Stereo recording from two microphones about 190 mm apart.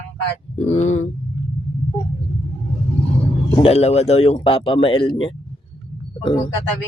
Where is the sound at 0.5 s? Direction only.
35° left (ahead or behind).